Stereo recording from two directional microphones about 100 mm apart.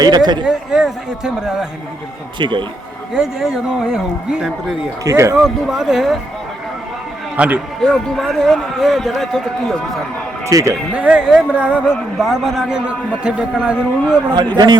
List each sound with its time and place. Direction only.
0.0 s speech: 45° right (ahead or behind)
0.4 s a man's voice: 5° right (ahead or behind)
2.4 s speech: 50° right (ahead or behind)
3.2 s speech: 5° right (ahead or behind)
5.0 s speech: 30° right (ahead or behind)
5.4 s a man's voice: 5° right (ahead or behind)
7.3 s speech: 10° right (ahead or behind)
7.8 s a man's voice: 5° left (ahead or behind)
10.5 s speech: 35° right (ahead or behind)
10.9 s speech: 10° right (ahead or behind)
14.3 s speech: 45° right (ahead or behind)